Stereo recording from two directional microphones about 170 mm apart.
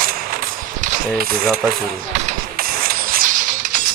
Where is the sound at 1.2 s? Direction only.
60° right (ahead or behind).